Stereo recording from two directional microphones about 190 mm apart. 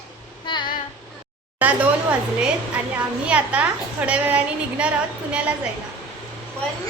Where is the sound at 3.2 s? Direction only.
5° right (ahead or behind).